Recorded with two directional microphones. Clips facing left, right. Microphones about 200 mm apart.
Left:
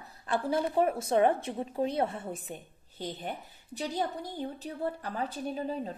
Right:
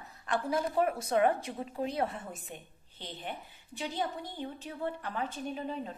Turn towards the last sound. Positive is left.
turn(degrees=35)  # may be behind; listen again after turning